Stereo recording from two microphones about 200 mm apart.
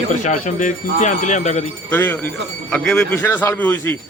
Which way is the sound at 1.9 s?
10° left (ahead or behind).